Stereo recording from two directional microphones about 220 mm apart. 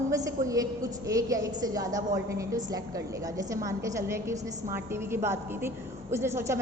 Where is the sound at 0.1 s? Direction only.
15° right (ahead or behind).